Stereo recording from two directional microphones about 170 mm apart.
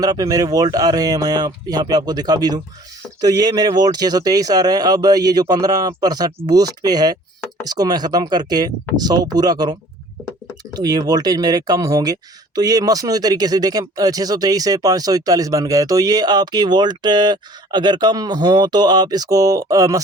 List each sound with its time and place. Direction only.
0.0 s speech: 20° right (ahead or behind)
10.8 s speech: 25° right (ahead or behind)